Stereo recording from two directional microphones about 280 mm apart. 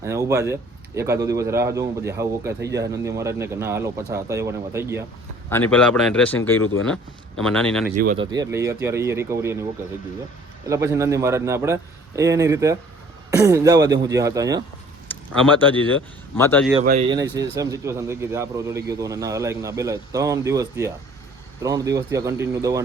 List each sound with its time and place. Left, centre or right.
0.0 s a man's voice: centre
5.5 s speech: centre
7.9 s speech: right
8.2 s a man's voice: centre
10.7 s a man's voice: centre
16.3 s a man's voice: centre
16.8 s speech: right
17.6 s a man's voice: centre